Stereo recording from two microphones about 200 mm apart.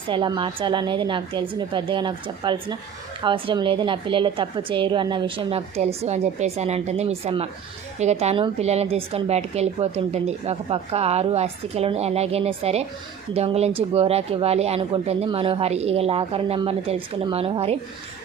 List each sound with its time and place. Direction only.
0.1 s a woman's voice: 25° right (ahead or behind)